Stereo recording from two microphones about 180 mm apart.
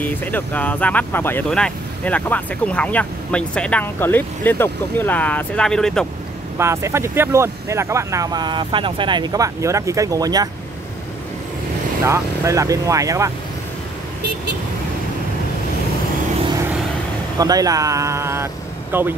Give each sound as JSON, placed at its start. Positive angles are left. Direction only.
{"t": 0.0, "sound": "speech", "side_deg": 10}
{"t": 6.6, "sound": "speech", "side_deg": -15}
{"t": 12.0, "sound": "speech", "side_deg": -15}
{"t": 17.4, "sound": "speech", "side_deg": -20}